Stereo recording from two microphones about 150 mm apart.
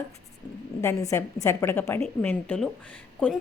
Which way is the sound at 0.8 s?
20° left (ahead or behind).